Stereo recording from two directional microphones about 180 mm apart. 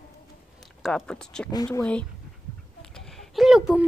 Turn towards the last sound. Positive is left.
turn(degrees=0)  # may be behind; listen again after turning